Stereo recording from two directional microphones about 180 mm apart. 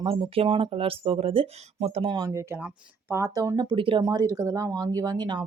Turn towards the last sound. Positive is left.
turn(degrees=-25)  # may be behind; listen again after turning